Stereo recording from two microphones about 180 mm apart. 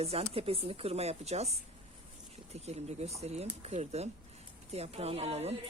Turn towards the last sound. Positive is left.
turn(degrees=-35)  # may be behind; listen again after turning